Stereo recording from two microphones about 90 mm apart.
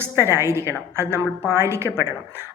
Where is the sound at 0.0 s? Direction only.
30° right (ahead or behind).